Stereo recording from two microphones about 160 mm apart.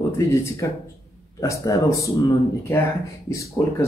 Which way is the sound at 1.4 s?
20° left (ahead or behind).